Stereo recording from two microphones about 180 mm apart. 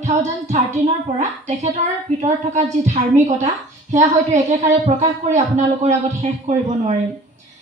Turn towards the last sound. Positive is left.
turn(degrees=-35)  # may be behind; listen again after turning